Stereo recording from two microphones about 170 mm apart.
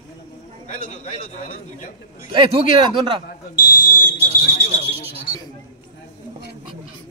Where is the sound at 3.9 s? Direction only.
55° left (ahead or behind).